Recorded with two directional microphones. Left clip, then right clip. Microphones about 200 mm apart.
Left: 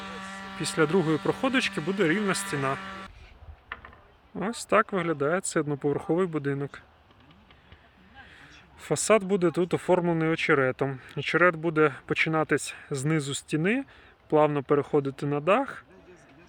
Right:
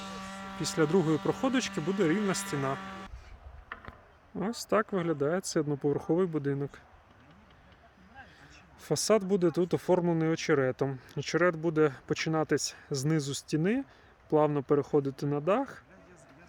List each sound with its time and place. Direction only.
0.2 s speech: 5° right (ahead or behind)
3.7 s a sound: 65° right (ahead or behind)
4.4 s speech: 10° right (ahead or behind)
8.4 s speech: 5° right (ahead or behind)